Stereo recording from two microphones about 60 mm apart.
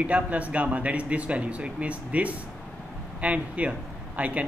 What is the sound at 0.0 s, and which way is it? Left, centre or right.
Speech, right.